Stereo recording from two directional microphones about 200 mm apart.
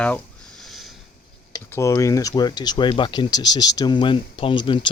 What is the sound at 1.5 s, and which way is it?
Speech, 15° left (ahead or behind).